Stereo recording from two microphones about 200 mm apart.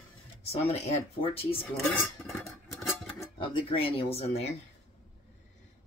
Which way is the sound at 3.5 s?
25° left (ahead or behind).